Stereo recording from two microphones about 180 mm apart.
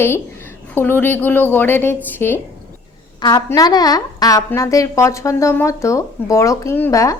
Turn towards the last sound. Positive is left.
turn(degrees=20)  # may be behind; listen again after turning